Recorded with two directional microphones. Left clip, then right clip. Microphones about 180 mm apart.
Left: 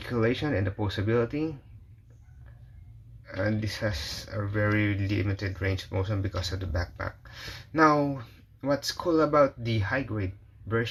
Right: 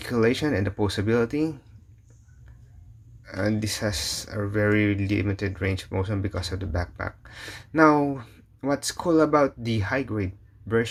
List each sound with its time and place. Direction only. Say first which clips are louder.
0.0 s speech: right 5 dB; 35° right (ahead or behind)
3.2 s speech: right 3 dB; 35° right (ahead or behind)